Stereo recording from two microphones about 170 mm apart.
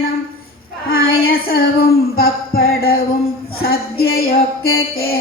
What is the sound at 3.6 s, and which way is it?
Music, 65° left (ahead or behind).